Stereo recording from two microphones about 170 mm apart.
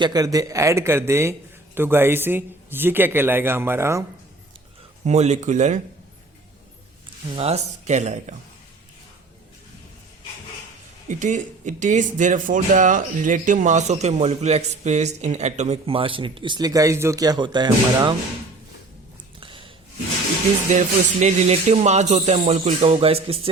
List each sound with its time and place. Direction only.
0.0 s a man's voice: 20° right (ahead or behind)
5.0 s speech: 40° right (ahead or behind)
7.3 s speech: 40° right (ahead or behind)
11.1 s speech: 45° right (ahead or behind); by 18.1 s 25° right (ahead or behind)
19.4 s snort: 30° right (ahead or behind)
20.7 s speech: 45° right (ahead or behind)